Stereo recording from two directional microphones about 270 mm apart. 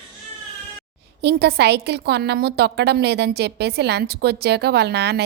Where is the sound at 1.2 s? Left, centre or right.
Right.